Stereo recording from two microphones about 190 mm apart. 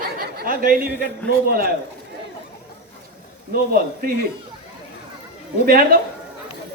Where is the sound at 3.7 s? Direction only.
50° right (ahead or behind).